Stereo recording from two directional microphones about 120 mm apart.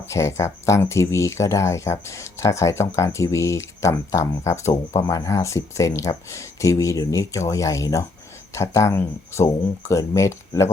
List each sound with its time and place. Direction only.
0.0 s speech: 25° left (ahead or behind)